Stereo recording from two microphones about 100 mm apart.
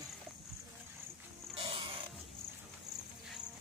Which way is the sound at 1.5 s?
65° right (ahead or behind).